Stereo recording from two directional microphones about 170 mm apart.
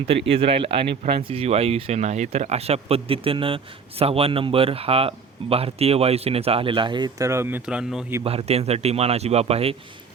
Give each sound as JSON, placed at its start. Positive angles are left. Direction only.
{"t": 0.3, "sound": "speech", "side_deg": -35}
{"t": 8.2, "sound": "speech", "side_deg": -35}